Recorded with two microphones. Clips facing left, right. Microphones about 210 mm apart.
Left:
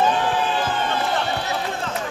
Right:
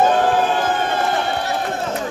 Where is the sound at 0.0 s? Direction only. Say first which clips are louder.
Right 5 dB; 50° right (ahead or behind).